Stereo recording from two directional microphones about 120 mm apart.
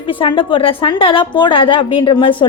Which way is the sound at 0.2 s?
45° left (ahead or behind).